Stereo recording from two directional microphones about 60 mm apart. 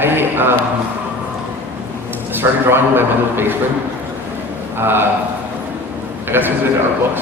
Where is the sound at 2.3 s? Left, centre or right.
Right.